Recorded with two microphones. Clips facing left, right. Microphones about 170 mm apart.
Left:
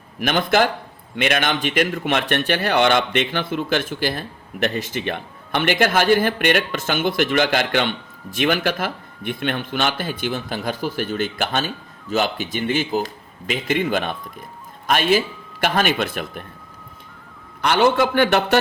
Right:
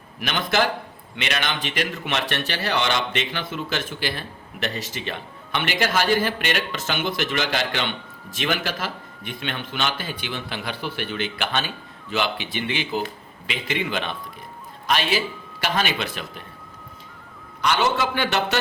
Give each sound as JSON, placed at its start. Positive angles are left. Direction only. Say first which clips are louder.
{"t": 0.2, "sound": "speech", "louder": "left 5 dB", "side_deg": 50}
{"t": 17.6, "sound": "a man's voice", "louder": "left 5 dB", "side_deg": 55}